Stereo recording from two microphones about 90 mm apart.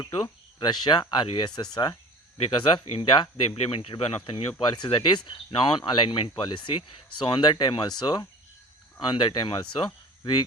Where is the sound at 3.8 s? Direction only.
90° left.